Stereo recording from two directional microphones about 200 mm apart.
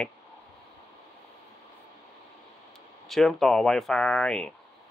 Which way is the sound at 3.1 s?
Centre (ahead or behind).